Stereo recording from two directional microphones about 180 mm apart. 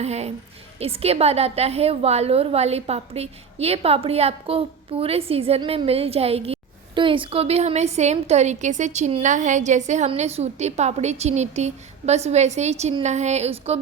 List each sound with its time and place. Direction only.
0.0 s a woman's voice: 35° right (ahead or behind)